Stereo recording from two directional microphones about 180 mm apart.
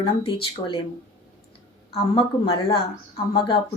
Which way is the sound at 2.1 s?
30° left (ahead or behind).